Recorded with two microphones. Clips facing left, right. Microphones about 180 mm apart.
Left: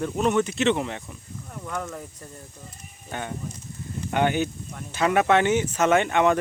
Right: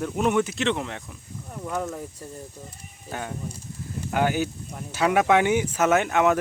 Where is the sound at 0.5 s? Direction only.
Centre (ahead or behind).